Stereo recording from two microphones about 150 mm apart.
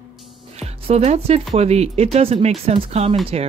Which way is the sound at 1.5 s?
45° right (ahead or behind).